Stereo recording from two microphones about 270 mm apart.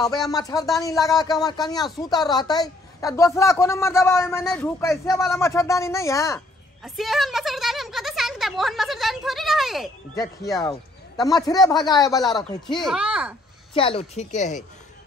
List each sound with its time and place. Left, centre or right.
0.0 s a woman's voice: centre
6.8 s speech: centre
10.1 s a woman's voice: centre
12.8 s speech: centre
13.7 s speech: left